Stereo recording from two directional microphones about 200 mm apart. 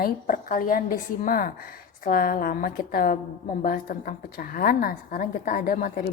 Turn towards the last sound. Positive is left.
turn(degrees=45)  # may be behind; listen again after turning